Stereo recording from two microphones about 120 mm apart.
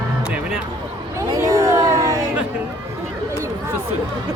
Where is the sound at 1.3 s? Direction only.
30° right (ahead or behind).